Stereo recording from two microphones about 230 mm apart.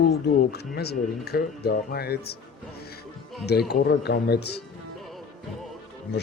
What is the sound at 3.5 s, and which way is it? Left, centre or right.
Speech, left.